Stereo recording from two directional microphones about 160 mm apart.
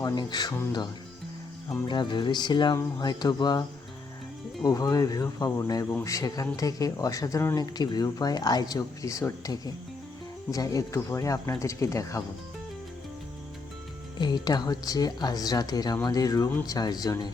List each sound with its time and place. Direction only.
0.0 s speech: 25° left (ahead or behind)
1.9 s speech: 30° left (ahead or behind)
4.6 s speech: 20° left (ahead or behind)
14.2 s speech: 25° left (ahead or behind)